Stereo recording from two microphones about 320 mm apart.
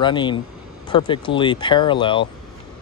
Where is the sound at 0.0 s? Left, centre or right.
Centre.